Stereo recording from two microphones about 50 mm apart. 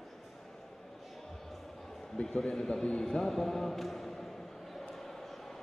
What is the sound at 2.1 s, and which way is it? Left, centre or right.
Speech, centre.